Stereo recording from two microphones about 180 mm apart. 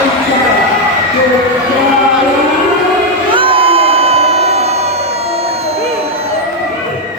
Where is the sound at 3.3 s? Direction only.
30° right (ahead or behind).